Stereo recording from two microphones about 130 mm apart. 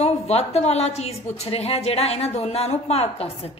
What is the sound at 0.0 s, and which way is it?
A woman's voice, 55° left (ahead or behind).